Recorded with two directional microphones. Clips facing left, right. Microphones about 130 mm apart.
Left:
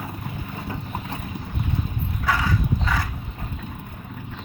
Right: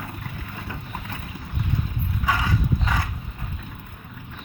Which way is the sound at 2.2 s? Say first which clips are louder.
Left 1 dB; 15° right (ahead or behind).